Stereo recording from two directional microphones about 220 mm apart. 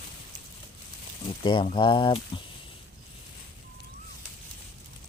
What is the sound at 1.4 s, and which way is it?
Speech, 20° left (ahead or behind).